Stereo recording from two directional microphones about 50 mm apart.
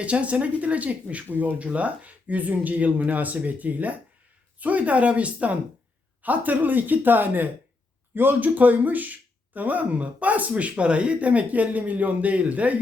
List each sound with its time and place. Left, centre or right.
0.0 s speech: right